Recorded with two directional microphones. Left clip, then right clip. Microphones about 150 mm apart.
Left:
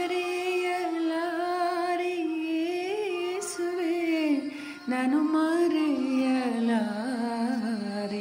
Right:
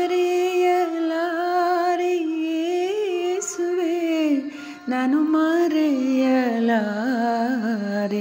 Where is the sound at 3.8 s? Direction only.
35° right (ahead or behind).